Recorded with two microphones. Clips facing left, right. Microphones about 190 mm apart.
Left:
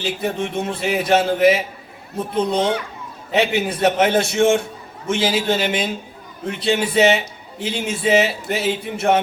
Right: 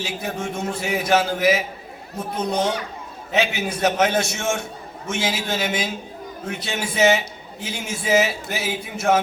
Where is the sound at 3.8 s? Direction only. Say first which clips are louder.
Left 3 dB; 30° left (ahead or behind).